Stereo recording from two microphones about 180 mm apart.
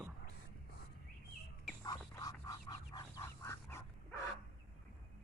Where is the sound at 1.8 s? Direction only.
20° left (ahead or behind).